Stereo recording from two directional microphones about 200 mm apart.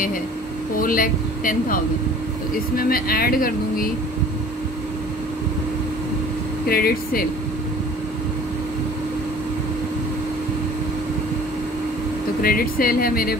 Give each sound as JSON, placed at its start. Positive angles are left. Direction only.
{"t": 0.7, "sound": "speech", "side_deg": 45}
{"t": 6.7, "sound": "speech", "side_deg": 50}
{"t": 12.4, "sound": "speech", "side_deg": 45}